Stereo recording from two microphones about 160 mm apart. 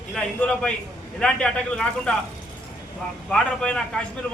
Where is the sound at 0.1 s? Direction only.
5° left (ahead or behind).